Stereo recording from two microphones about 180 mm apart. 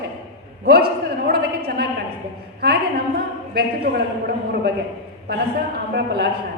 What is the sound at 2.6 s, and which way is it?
A man's voice, 60° right (ahead or behind).